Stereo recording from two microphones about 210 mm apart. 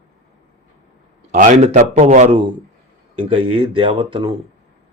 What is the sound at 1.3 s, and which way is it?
Speech, 35° right (ahead or behind).